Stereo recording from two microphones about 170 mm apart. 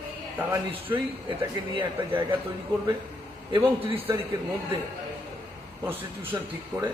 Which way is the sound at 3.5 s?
30° right (ahead or behind).